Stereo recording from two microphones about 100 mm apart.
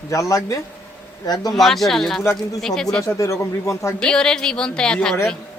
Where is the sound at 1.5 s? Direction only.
Centre (ahead or behind).